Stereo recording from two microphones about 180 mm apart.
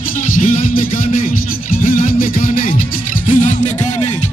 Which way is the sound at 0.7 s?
50° left (ahead or behind).